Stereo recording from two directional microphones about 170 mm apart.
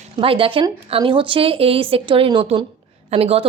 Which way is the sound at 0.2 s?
30° right (ahead or behind).